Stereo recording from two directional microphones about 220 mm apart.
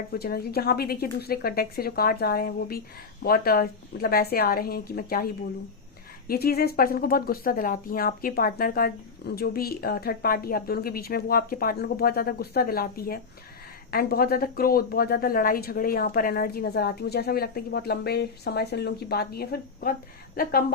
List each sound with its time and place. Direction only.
0.1 s a woman's voice: 45° left (ahead or behind)